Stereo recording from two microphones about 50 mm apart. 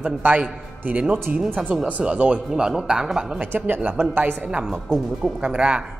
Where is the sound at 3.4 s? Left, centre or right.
Right.